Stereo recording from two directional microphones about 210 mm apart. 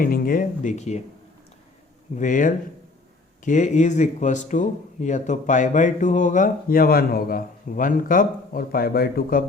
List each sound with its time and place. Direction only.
0.0 s speech: 40° left (ahead or behind)
2.1 s speech: 35° left (ahead or behind)